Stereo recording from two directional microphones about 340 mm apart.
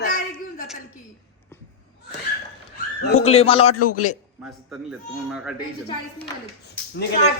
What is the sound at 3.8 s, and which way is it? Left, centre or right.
Speech, left.